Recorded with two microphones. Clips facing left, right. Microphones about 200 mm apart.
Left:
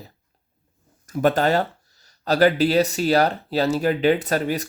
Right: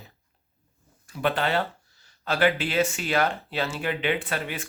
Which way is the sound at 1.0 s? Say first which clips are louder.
Left 7 dB; 45° left (ahead or behind).